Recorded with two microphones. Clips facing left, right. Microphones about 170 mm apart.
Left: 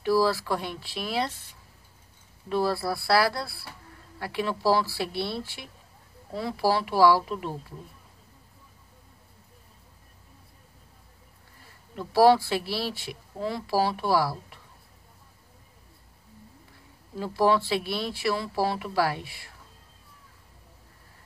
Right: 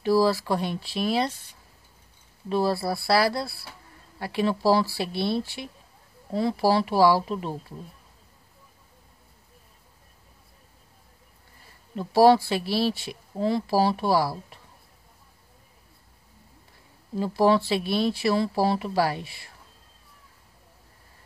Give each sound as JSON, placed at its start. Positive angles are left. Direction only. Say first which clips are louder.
{"t": 0.0, "sound": "speech", "louder": "right 2 dB", "side_deg": -20}
{"t": 2.5, "sound": "speech", "louder": "right 2 dB", "side_deg": -20}
{"t": 6.3, "sound": "speech", "louder": "right 4 dB", "side_deg": -25}
{"t": 11.9, "sound": "speech", "louder": "right 2 dB", "side_deg": -20}
{"t": 17.2, "sound": "speech", "louder": "right 2 dB", "side_deg": -25}